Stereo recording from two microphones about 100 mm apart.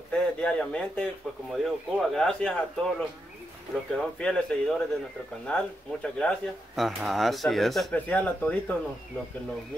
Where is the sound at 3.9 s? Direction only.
10° left (ahead or behind).